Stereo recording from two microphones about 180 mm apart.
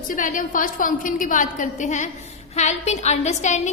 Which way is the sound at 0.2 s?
45° left (ahead or behind).